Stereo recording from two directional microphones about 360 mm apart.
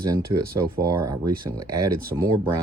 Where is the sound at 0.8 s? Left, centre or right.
Centre.